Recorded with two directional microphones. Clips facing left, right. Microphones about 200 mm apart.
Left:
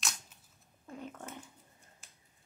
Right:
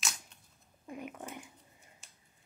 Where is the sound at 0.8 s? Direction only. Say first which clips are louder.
Right 2 dB; 15° right (ahead or behind).